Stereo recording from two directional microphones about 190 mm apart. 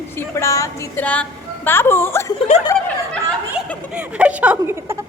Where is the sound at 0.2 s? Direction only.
15° left (ahead or behind).